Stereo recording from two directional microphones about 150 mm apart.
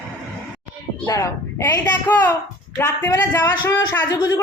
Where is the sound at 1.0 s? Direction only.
20° left (ahead or behind).